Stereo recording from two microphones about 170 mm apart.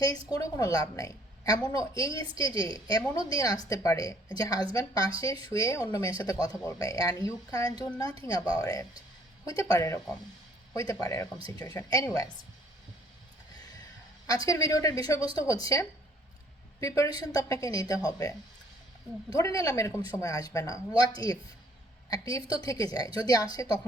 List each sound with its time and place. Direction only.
0.3 s a woman's voice: 20° left (ahead or behind)
11.0 s a woman's voice: 20° left (ahead or behind)
14.3 s a woman's voice: 20° left (ahead or behind)
19.4 s a woman's voice: 20° left (ahead or behind)